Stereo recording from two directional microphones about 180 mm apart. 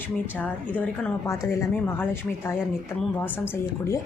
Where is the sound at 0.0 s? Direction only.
10° left (ahead or behind).